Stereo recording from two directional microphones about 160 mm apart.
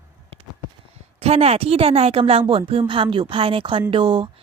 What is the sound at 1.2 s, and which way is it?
A woman's voice, 40° right (ahead or behind).